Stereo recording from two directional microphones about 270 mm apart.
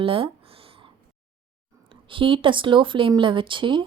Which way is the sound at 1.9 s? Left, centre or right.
Centre.